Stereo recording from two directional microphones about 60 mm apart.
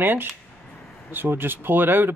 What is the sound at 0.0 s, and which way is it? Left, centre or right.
Speech, right.